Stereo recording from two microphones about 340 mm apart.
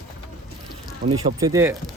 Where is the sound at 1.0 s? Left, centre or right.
Right.